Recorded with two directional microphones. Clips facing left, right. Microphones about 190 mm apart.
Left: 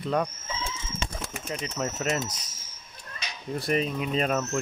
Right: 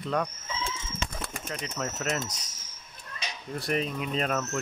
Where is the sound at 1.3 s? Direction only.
5° left (ahead or behind).